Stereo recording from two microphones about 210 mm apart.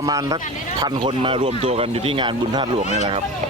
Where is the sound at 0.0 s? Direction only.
15° right (ahead or behind).